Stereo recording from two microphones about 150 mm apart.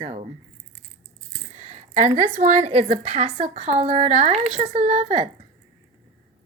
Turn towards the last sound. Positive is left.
turn(degrees=-50)  # may be behind; listen again after turning